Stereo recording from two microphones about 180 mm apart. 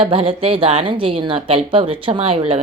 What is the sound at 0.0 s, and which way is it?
Speech, 30° right (ahead or behind).